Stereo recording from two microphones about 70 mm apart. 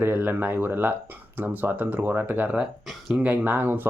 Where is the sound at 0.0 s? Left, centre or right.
Right.